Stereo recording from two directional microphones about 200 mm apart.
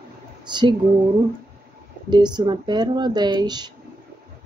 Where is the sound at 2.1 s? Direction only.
20° right (ahead or behind).